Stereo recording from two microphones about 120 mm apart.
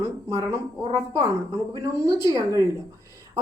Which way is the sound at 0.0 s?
25° right (ahead or behind).